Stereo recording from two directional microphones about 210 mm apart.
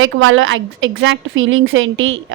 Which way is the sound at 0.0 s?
75° right (ahead or behind).